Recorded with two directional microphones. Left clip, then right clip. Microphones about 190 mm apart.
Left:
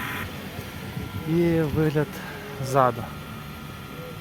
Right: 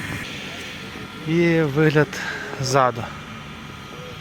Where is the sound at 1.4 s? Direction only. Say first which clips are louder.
Right 6 dB; 10° right (ahead or behind).